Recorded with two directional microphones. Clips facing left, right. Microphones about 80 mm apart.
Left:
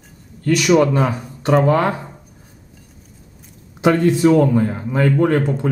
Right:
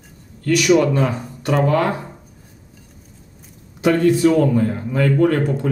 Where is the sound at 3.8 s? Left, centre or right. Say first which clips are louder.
Even; left.